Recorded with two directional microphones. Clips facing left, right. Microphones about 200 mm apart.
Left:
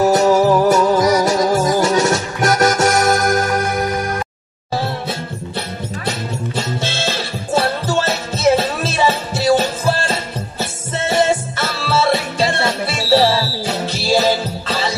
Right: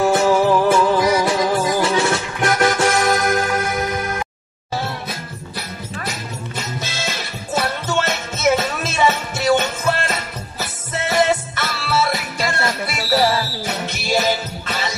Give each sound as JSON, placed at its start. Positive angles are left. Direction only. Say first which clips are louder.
{"t": 0.0, "sound": "music", "louder": "left 3 dB", "side_deg": 40}
{"t": 6.0, "sound": "music", "louder": "left 8 dB", "side_deg": 30}